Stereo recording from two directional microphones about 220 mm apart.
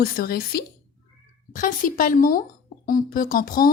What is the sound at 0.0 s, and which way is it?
A woman's voice, 45° left (ahead or behind).